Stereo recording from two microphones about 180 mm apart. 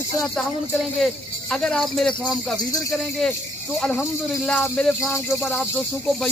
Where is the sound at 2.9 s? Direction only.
Centre (ahead or behind).